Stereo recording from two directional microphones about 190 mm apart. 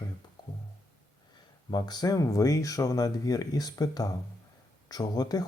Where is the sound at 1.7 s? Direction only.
20° left (ahead or behind).